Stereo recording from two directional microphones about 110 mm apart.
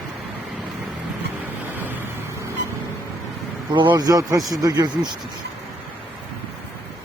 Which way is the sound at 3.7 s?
45° right (ahead or behind).